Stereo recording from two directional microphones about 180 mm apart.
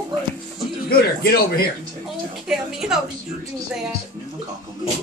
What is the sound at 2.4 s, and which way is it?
Speech, 5° right (ahead or behind).